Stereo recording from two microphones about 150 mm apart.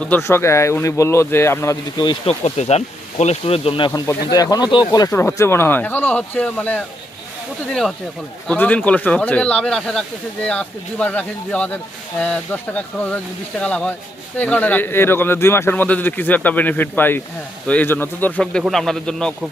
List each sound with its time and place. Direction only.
0.0 s a man's voice: 15° left (ahead or behind)
2.0 s speech: 45° left (ahead or behind)
4.0 s a man's voice: 20° left (ahead or behind); by 19.5 s 5° left (ahead or behind)